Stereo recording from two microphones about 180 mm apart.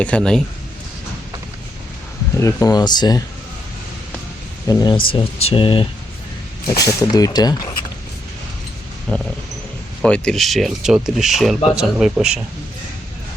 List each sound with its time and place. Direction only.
0.0 s speech: 5° left (ahead or behind)
2.3 s speech: 15° left (ahead or behind)
4.7 s speech: 20° left (ahead or behind)
9.1 s speech: 5° left (ahead or behind)